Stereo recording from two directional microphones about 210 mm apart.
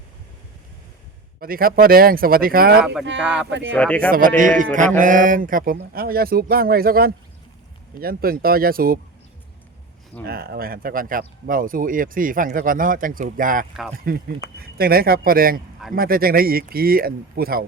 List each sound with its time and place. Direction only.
1.4 s speech: 45° right (ahead or behind)
3.2 s speech: 5° right (ahead or behind)
4.4 s speech: 40° right (ahead or behind)
10.2 s speech: 45° right (ahead or behind)